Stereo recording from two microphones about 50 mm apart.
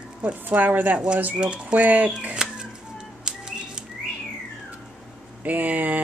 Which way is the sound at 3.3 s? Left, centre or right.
Centre.